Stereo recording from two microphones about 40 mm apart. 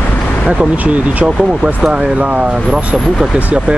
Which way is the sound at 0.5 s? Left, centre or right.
Right.